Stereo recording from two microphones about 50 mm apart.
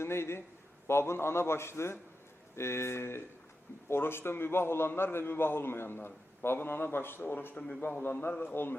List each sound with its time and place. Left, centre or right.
0.0 s a man's voice: left
7.6 s a man's voice: left
8.4 s a man's voice: left